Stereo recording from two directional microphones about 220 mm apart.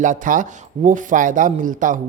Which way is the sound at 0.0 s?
35° right (ahead or behind).